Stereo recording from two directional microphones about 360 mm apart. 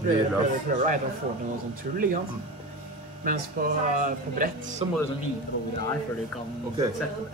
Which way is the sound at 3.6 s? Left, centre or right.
Right.